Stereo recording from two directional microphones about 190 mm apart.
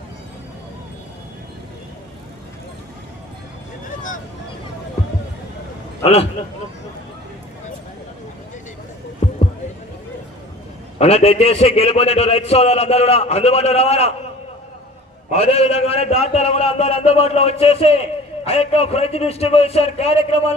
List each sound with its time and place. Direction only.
6.0 s a man's voice: 30° left (ahead or behind)
9.2 s a sound: 35° left (ahead or behind)
10.9 s a man's voice: 35° left (ahead or behind)
15.3 s a man's voice: 30° left (ahead or behind)